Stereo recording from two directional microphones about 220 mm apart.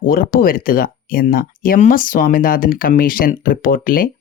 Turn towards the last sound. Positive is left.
turn(degrees=40)  # may be behind; listen again after turning